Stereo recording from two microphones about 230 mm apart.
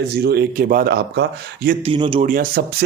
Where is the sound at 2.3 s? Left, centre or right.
Right.